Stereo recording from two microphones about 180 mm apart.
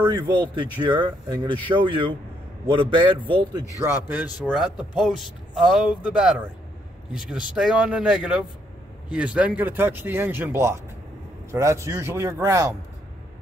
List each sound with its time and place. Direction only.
0.0 s a man's voice: 25° right (ahead or behind)